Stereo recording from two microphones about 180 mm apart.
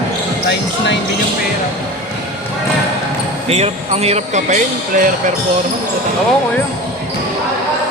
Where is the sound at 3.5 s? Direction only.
35° right (ahead or behind).